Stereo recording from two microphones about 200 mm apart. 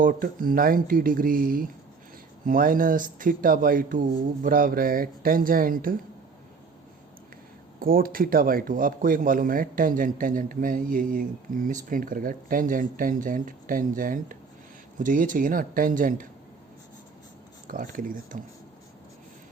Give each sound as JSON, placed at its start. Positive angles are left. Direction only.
{"t": 0.0, "sound": "speech", "side_deg": -45}
{"t": 7.8, "sound": "speech", "side_deg": -45}
{"t": 17.7, "sound": "speech", "side_deg": -45}